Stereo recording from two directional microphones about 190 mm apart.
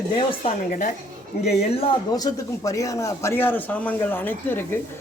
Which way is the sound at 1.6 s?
30° left (ahead or behind).